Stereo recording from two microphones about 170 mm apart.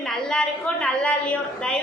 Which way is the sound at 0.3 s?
5° left (ahead or behind).